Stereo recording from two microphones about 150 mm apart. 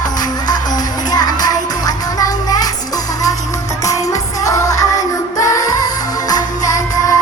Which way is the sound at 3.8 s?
20° left (ahead or behind).